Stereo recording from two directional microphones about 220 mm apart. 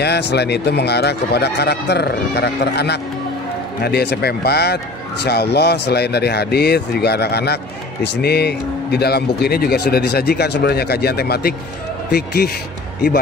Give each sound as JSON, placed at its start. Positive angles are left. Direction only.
{"t": 0.0, "sound": "speech", "side_deg": 50}